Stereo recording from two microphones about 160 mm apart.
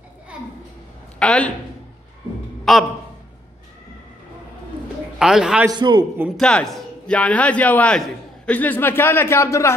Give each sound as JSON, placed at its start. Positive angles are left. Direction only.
{"t": 1.2, "sound": "a man's voice", "side_deg": 5}
{"t": 2.7, "sound": "a man's voice", "side_deg": 0}
{"t": 5.2, "sound": "a man's voice", "side_deg": -5}
{"t": 5.7, "sound": "a man's voice", "side_deg": -25}
{"t": 6.3, "sound": "a man's voice", "side_deg": 5}